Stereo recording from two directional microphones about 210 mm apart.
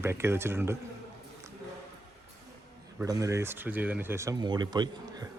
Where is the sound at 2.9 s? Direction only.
15° right (ahead or behind).